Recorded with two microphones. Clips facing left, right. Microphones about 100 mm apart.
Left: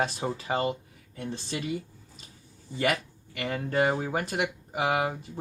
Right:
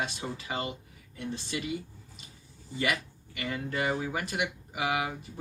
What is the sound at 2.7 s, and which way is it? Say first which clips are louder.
Speech: left 4 dB; 40° left (ahead or behind).